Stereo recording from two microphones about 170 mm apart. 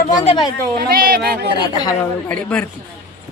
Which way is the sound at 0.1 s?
45° left (ahead or behind).